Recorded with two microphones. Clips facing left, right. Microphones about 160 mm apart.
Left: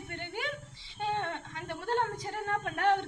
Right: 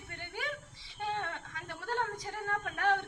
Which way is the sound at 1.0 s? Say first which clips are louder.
Left 3 dB; 20° left (ahead or behind).